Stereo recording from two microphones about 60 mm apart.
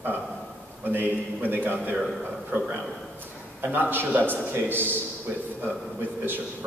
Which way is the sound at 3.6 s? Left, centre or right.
Right.